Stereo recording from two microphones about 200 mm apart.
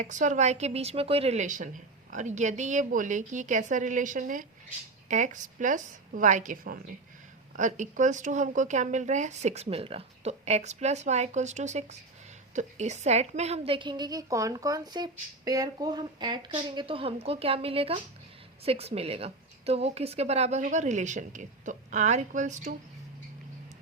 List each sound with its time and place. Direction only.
0.0 s a woman's voice: 40° right (ahead or behind)